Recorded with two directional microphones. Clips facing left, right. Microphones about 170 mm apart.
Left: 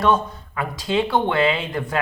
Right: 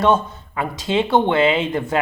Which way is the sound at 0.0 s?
25° right (ahead or behind).